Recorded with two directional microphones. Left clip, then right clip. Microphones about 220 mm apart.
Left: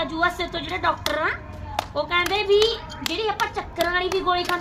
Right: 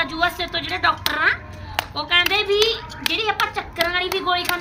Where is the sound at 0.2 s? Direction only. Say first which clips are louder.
Right 2 dB; centre (ahead or behind).